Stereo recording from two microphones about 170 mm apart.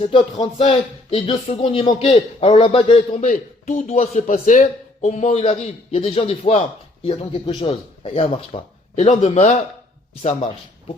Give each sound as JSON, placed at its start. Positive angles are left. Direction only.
{"t": 0.0, "sound": "speech", "side_deg": 30}
{"t": 3.2, "sound": "speech", "side_deg": 45}